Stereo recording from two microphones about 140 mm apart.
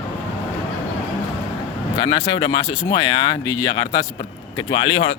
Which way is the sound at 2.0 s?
30° left (ahead or behind).